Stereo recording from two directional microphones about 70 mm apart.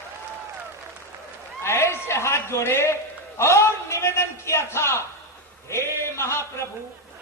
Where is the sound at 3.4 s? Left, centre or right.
Left.